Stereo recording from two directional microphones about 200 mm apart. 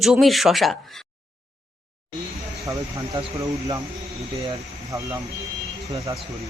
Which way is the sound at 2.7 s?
20° right (ahead or behind).